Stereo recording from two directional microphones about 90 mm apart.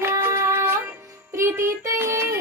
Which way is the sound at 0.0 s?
30° right (ahead or behind).